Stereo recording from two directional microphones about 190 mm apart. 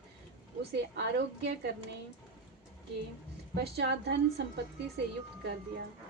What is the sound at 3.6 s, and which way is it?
A woman's voice, 60° right (ahead or behind).